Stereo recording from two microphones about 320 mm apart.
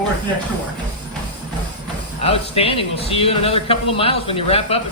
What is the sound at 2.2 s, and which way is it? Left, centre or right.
A man's voice, centre.